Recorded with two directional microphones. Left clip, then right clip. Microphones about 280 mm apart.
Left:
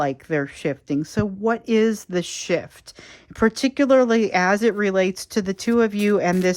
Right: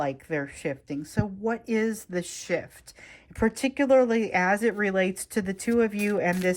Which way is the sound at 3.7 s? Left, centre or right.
Centre.